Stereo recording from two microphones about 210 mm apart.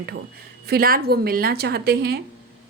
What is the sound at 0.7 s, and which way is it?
A woman's voice, 45° right (ahead or behind).